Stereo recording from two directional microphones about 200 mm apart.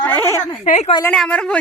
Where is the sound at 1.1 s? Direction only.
5° left (ahead or behind).